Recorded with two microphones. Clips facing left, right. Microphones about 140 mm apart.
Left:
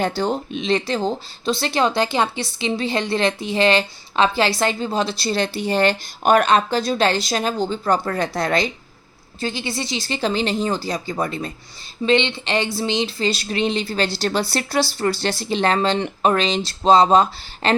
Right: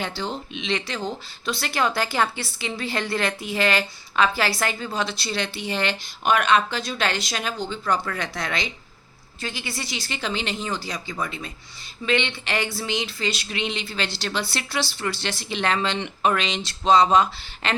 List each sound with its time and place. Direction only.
0.2 s a woman's voice: 45° left (ahead or behind)
9.4 s a woman's voice: 25° left (ahead or behind)
12.0 s a woman's voice: 25° left (ahead or behind)